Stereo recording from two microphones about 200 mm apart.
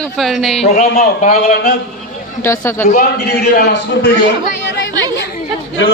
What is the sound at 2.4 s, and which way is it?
Speech, 15° left (ahead or behind).